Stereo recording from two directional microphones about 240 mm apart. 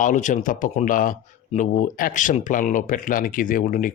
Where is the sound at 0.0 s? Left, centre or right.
Left.